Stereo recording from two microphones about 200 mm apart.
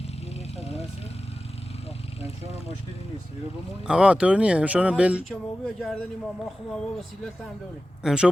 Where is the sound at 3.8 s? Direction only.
5° right (ahead or behind).